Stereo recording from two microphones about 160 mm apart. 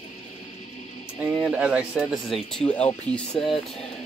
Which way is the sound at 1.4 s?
5° right (ahead or behind).